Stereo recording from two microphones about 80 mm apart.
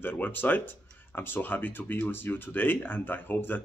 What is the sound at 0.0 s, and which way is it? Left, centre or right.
Speech, left.